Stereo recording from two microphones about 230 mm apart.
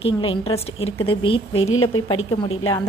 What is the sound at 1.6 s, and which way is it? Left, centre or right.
Speech, left.